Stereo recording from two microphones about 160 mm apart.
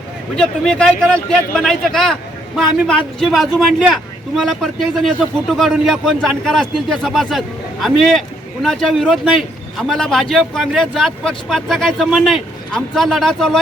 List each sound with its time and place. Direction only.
0.3 s a man's voice: 5° left (ahead or behind)